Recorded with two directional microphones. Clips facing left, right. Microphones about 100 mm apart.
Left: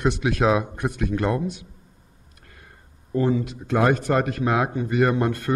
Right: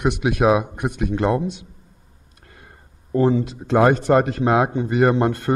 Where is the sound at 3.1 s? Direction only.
30° right (ahead or behind).